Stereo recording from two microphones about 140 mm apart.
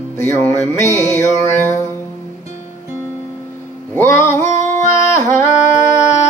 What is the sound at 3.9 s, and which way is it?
Music, 15° left (ahead or behind).